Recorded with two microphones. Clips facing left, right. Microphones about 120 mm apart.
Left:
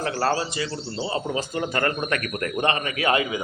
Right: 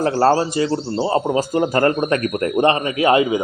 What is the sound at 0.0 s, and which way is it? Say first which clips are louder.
Speech: right 8 dB; 35° right (ahead or behind).